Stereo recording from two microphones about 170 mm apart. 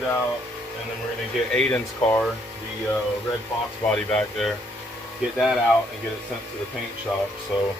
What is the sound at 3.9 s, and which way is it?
Speech, 5° left (ahead or behind).